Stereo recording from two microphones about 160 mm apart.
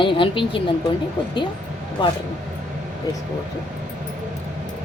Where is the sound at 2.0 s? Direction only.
30° left (ahead or behind).